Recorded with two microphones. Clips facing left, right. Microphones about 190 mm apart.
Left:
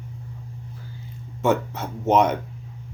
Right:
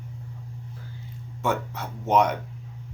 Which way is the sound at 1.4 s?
25° left (ahead or behind).